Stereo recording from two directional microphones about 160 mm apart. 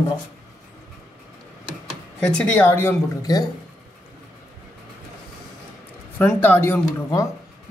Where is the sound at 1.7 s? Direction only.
5° left (ahead or behind); by 3.4 s 25° left (ahead or behind).